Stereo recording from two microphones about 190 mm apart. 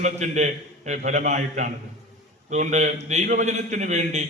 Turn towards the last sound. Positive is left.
turn(degrees=-40)  # may be behind; listen again after turning